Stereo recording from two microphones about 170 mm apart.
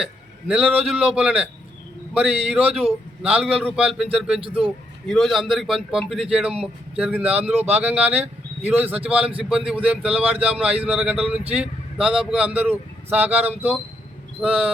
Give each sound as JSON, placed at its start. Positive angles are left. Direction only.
{"t": 0.0, "sound": "a man's voice", "side_deg": -5}
{"t": 4.4, "sound": "a man's voice", "side_deg": -30}
{"t": 5.0, "sound": "a man's voice", "side_deg": 0}